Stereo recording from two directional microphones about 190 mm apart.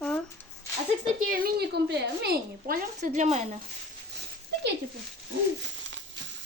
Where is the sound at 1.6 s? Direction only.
60° right (ahead or behind); by 3.4 s 35° right (ahead or behind).